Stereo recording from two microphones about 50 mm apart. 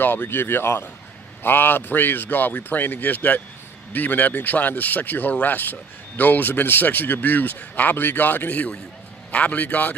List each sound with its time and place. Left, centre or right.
0.0 s speech: left